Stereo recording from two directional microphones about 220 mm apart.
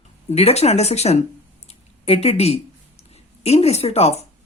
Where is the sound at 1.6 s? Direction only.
30° left (ahead or behind).